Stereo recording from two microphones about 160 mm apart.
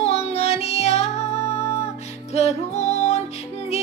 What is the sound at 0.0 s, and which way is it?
Music, 40° left (ahead or behind).